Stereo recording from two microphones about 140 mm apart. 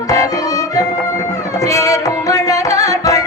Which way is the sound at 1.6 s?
25° left (ahead or behind).